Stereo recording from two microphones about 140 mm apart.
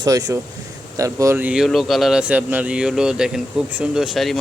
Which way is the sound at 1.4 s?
10° right (ahead or behind).